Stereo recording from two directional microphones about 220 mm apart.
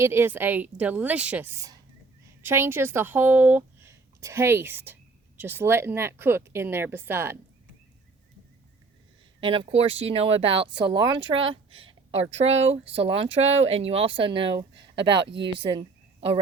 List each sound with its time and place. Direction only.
0.0 s a woman's voice: 10° right (ahead or behind)
9.4 s speech: 25° right (ahead or behind)
12.8 s speech: 55° right (ahead or behind)
13.1 s speech: 25° right (ahead or behind)
15.3 s speech: 50° right (ahead or behind)